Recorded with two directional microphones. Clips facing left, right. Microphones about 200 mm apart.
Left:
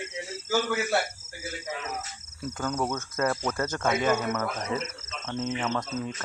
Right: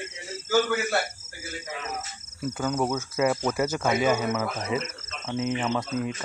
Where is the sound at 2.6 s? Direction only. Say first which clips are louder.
Right 3 dB; 5° right (ahead or behind).